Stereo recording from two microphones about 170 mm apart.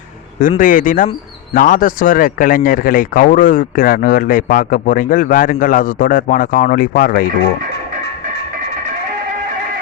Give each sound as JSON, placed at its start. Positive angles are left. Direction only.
{"t": 0.6, "sound": "speech", "side_deg": 50}